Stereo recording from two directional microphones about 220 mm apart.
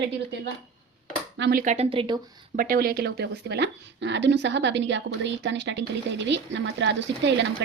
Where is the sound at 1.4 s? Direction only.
50° right (ahead or behind).